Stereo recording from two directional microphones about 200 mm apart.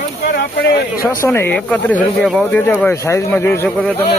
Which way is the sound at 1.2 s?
10° left (ahead or behind).